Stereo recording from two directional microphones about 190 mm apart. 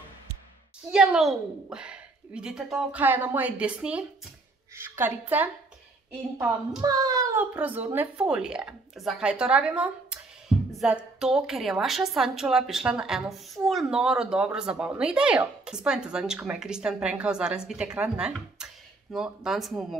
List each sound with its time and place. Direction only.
0.9 s a woman's voice: 5° right (ahead or behind)
6.8 s a woman's voice: 20° right (ahead or behind); by 20.0 s centre (ahead or behind)